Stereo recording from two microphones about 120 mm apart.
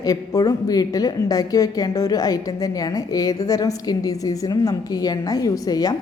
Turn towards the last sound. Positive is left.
turn(degrees=30)  # may be behind; listen again after turning